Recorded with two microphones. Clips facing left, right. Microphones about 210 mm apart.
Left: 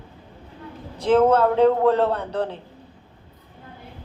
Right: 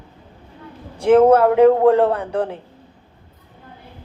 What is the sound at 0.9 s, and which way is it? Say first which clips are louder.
A man's voice: right 5 dB; 30° right (ahead or behind).